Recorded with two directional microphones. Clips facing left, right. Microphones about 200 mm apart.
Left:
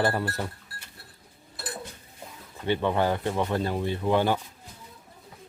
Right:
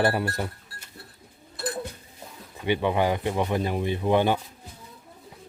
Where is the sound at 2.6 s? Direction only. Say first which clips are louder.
Right 1 dB; 15° right (ahead or behind).